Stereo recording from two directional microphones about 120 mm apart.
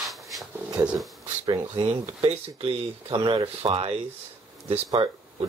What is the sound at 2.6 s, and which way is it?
Speech, 50° right (ahead or behind).